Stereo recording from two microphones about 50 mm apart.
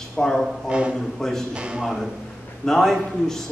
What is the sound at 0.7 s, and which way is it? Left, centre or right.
Speech, right.